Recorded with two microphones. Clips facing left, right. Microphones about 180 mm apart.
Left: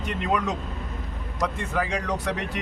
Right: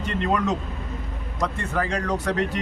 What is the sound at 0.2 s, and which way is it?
Speech, 10° left (ahead or behind).